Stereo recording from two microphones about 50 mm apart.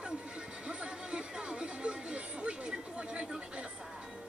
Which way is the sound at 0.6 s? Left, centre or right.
Centre.